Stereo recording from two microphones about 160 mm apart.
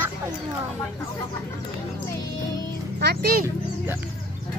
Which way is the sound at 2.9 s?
80° right.